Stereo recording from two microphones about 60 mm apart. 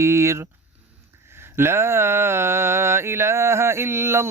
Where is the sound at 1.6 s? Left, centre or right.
Right.